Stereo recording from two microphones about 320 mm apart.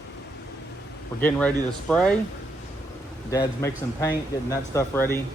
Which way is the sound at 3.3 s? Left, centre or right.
Centre.